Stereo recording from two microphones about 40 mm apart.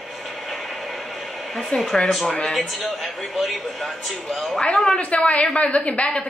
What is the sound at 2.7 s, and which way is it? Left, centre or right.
A man's voice, centre.